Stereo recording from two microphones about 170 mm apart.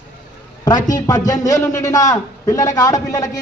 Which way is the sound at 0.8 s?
50° left (ahead or behind).